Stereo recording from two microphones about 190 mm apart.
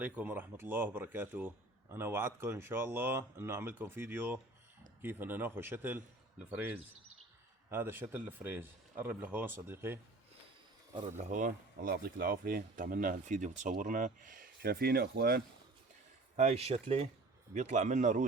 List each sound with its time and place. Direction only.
0.0 s a man's voice: 10° right (ahead or behind)
11.3 s speech: 45° right (ahead or behind)
16.4 s speech: 35° right (ahead or behind)